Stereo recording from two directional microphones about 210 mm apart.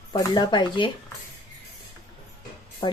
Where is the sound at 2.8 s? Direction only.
20° left (ahead or behind).